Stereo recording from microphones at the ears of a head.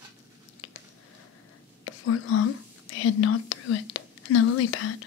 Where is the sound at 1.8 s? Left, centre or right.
Left.